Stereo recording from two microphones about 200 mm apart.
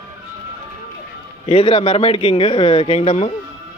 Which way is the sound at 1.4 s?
25° left (ahead or behind).